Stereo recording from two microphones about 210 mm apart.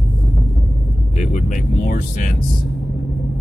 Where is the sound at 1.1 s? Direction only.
35° left (ahead or behind).